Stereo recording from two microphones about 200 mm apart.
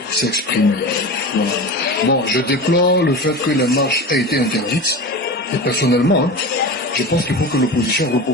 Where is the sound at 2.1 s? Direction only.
50° left (ahead or behind).